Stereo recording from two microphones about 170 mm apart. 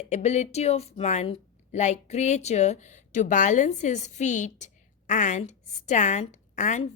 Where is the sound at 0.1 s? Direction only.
40° left (ahead or behind).